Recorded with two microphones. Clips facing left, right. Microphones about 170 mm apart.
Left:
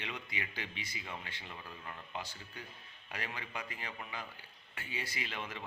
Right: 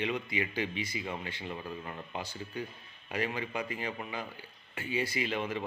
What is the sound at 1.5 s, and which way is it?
Speech, 25° right (ahead or behind).